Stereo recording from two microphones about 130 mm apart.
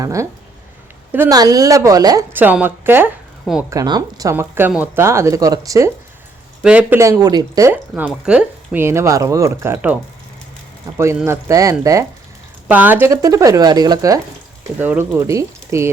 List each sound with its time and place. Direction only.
0.0 s speech: 25° right (ahead or behind)
1.3 s speech: 30° right (ahead or behind)
2.3 s a woman's voice: 10° right (ahead or behind)
3.7 s speech: 30° right (ahead or behind)
6.6 s speech: 10° right (ahead or behind)
7.0 s speech: 25° right (ahead or behind)
8.2 s speech: 5° right (ahead or behind)
8.8 s speech: 20° right (ahead or behind)
9.7 s speech: 15° right (ahead or behind)
12.6 s a woman's voice: 15° right (ahead or behind)
13.1 s speech: 25° right (ahead or behind)
14.8 s speech: 15° right (ahead or behind)